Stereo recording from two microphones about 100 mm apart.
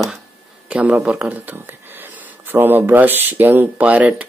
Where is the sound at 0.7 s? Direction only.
10° right (ahead or behind).